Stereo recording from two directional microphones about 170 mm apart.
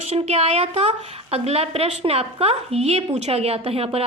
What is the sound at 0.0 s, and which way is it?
A woman's voice, 40° right (ahead or behind).